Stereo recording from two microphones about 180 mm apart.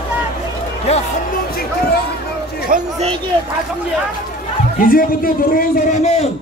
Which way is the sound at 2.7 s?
50° right (ahead or behind).